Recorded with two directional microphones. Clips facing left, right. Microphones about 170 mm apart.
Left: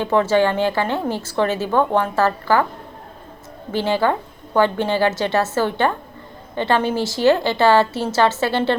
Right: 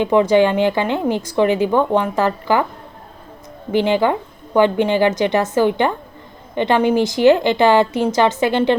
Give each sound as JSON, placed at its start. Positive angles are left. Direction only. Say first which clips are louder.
{"t": 0.0, "sound": "a woman's voice", "louder": "right 3 dB", "side_deg": -15}
{"t": 3.7, "sound": "a woman's voice", "louder": "right 3 dB", "side_deg": -15}